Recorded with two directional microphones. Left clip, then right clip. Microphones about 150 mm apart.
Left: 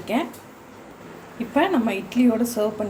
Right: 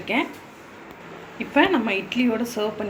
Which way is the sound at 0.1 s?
35° left (ahead or behind).